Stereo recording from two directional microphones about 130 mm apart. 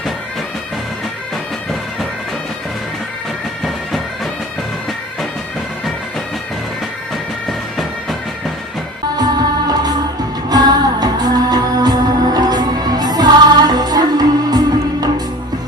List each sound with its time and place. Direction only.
3.6 s bagpipes: centre (ahead or behind)
9.1 s music: 30° right (ahead or behind)